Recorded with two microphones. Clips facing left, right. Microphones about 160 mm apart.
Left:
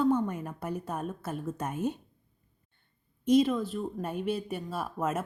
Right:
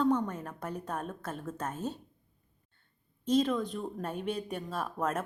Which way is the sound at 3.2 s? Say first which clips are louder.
Left 4 dB; 10° left (ahead or behind).